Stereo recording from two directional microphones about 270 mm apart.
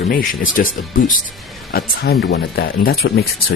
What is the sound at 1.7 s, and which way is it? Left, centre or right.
Speech, left.